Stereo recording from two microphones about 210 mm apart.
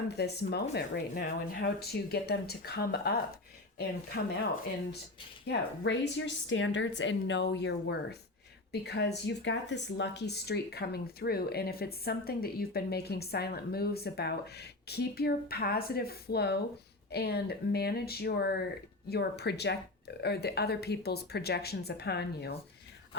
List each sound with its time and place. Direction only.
0.2 s speech: 50° left (ahead or behind)
5.5 s a woman's voice: 55° left (ahead or behind)